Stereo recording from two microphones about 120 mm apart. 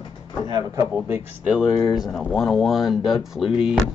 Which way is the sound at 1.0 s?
20° right (ahead or behind).